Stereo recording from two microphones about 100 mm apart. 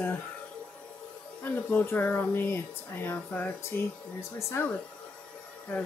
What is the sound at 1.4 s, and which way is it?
Speech, 15° left (ahead or behind).